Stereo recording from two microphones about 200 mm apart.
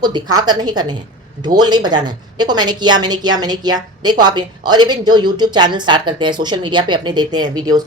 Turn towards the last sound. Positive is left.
turn(degrees=-20)  # may be behind; listen again after turning